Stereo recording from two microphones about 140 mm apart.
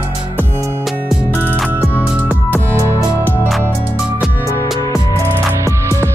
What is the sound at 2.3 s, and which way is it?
Music, 15° left (ahead or behind).